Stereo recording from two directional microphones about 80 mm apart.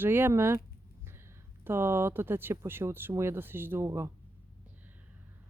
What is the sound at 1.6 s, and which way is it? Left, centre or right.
Speech, right.